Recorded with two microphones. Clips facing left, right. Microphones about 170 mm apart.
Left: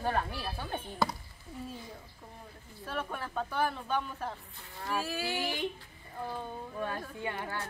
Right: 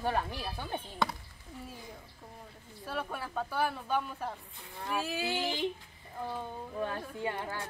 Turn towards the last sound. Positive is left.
turn(degrees=-25)  # may be behind; listen again after turning